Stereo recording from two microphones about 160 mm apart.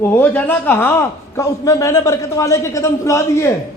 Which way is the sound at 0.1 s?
10° left (ahead or behind).